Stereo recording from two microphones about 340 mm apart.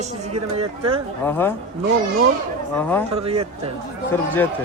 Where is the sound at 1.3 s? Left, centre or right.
Centre.